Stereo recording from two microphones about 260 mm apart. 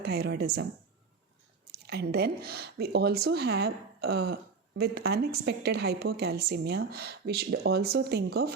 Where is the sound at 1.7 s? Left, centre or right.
Right.